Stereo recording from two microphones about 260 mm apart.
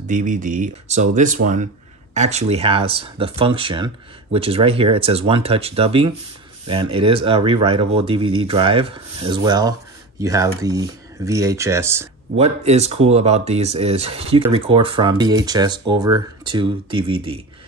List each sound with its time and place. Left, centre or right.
0.0 s speech: right; by 12.1 s centre
12.4 s speech: right